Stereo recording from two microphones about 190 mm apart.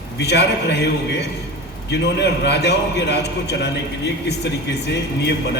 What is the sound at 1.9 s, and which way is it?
A man's voice, 60° left (ahead or behind).